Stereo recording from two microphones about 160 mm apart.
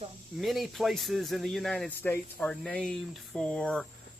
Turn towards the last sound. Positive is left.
turn(degrees=5)  # may be behind; listen again after turning